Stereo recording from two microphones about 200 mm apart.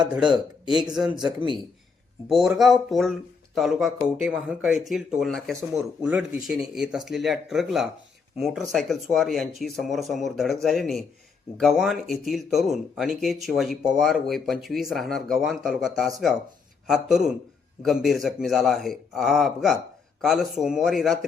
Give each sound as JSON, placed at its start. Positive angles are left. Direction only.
{"t": 0.8, "sound": "speech", "side_deg": -20}
{"t": 2.3, "sound": "speech", "side_deg": 0}